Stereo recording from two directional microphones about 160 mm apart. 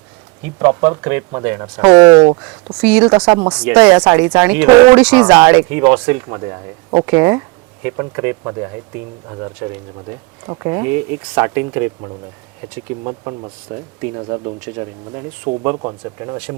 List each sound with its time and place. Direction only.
0.4 s speech: 15° right (ahead or behind)
1.8 s speech: 35° right (ahead or behind)
2.4 s speech: 10° right (ahead or behind)
3.9 s speech: 25° right (ahead or behind)
4.4 s speech: 10° right (ahead or behind)